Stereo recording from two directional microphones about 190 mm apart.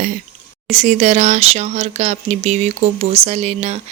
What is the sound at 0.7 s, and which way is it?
Speech, 35° right (ahead or behind).